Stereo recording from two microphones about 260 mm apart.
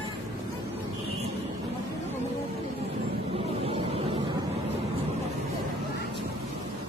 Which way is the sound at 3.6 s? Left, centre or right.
Right.